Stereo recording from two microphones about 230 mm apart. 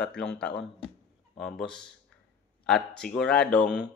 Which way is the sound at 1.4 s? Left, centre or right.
Centre.